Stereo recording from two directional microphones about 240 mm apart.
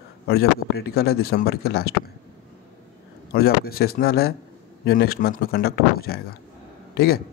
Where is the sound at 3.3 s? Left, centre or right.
Left.